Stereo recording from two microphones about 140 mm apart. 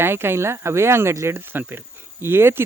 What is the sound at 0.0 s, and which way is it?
Speech, 15° right (ahead or behind).